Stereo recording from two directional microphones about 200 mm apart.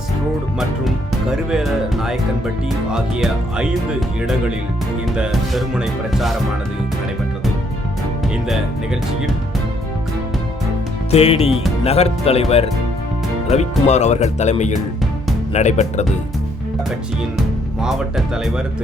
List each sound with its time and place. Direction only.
0.9 s speech: 5° right (ahead or behind)
5.0 s speech: 5° right (ahead or behind)
11.1 s speech: 30° left (ahead or behind)
17.3 s music: centre (ahead or behind)